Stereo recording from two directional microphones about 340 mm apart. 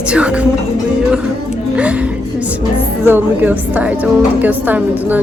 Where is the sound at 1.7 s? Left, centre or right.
Centre.